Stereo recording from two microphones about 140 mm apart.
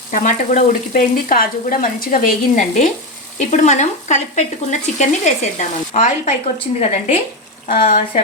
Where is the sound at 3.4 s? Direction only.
55° left (ahead or behind).